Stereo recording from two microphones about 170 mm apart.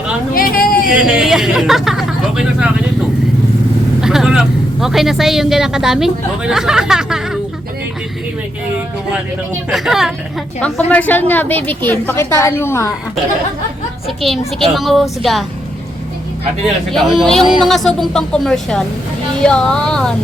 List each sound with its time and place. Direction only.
0.3 s a sound: 60° left (ahead or behind)
0.9 s speech: 5° right (ahead or behind)
4.0 s speech: 5° right (ahead or behind)
9.6 s speech: centre (ahead or behind)
10.8 s a woman's voice: 10° left (ahead or behind)
14.2 s speech: centre (ahead or behind)
16.9 s speech: centre (ahead or behind)